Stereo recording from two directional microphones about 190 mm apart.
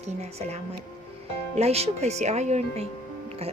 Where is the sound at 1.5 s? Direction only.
35° right (ahead or behind).